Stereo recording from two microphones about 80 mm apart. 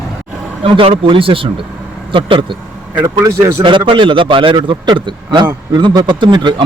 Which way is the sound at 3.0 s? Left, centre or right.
Right.